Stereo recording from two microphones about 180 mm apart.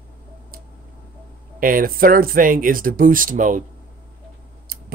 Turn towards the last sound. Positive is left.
turn(degrees=-55)  # may be behind; listen again after turning